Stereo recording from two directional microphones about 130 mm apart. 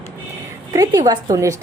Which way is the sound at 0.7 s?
30° right (ahead or behind).